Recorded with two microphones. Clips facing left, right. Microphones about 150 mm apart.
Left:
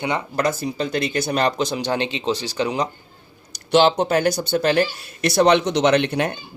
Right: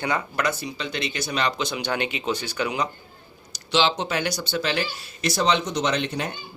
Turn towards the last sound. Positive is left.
turn(degrees=65)  # may be behind; listen again after turning